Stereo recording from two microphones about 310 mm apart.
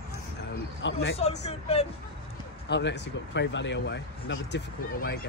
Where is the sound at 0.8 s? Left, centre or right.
Left.